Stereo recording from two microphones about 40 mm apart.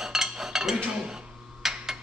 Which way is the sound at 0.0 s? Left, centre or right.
Centre.